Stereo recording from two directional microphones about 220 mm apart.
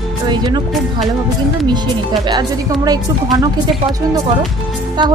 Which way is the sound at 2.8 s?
15° right (ahead or behind).